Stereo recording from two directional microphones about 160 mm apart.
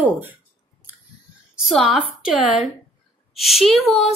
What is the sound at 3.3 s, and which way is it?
Speech, centre (ahead or behind).